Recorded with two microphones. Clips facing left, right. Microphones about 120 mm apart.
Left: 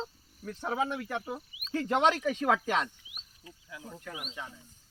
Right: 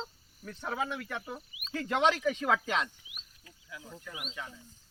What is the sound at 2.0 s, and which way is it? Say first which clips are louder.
Speech: even; 45° left (ahead or behind).